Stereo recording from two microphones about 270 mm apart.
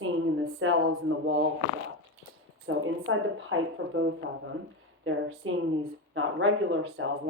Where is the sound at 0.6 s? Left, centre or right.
Right.